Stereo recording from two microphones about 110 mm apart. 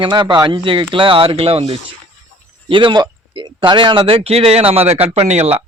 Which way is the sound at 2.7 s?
50° right (ahead or behind).